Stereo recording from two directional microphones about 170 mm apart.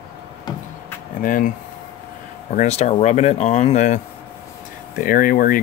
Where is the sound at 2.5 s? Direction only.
40° left (ahead or behind).